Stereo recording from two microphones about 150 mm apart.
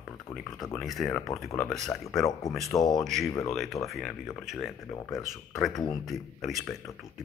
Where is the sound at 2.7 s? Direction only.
20° left (ahead or behind).